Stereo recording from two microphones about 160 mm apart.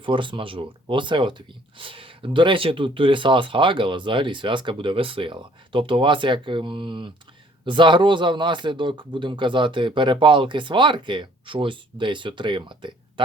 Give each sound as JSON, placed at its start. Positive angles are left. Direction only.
{"t": 0.0, "sound": "speech", "side_deg": -30}